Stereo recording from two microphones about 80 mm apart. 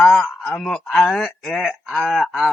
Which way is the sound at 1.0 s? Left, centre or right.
Centre.